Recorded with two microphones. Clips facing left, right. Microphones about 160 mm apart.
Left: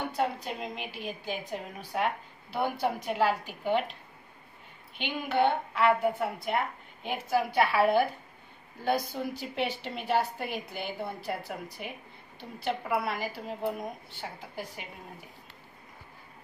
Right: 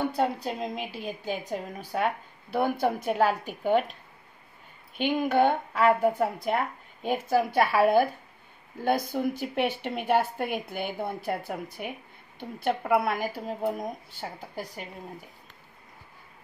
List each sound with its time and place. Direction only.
0.1 s a woman's voice: 40° right (ahead or behind)
2.5 s a woman's voice: 50° right (ahead or behind)
4.9 s a woman's voice: 45° right (ahead or behind)